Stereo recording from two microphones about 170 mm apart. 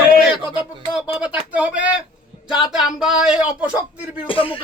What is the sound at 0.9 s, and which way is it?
Speech, 5° right (ahead or behind).